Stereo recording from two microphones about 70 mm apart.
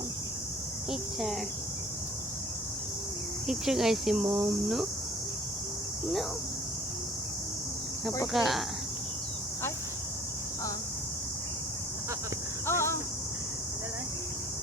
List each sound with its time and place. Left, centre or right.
0.9 s speech: centre
3.4 s speech: centre
4.3 s speech: right
8.3 s speech: centre
12.6 s cricket: left